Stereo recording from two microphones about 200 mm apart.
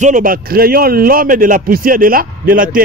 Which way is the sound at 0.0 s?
40° right (ahead or behind).